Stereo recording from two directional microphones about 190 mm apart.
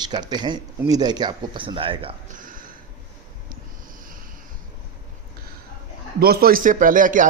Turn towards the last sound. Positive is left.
turn(degrees=-45)  # may be behind; listen again after turning